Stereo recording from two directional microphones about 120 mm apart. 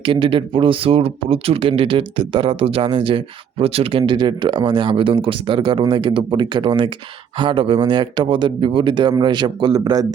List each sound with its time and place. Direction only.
0.0 s speech: 45° right (ahead or behind)